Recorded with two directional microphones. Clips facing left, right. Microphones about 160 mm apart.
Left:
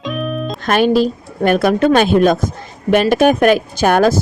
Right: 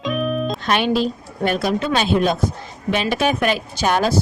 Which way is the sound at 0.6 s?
45° left (ahead or behind).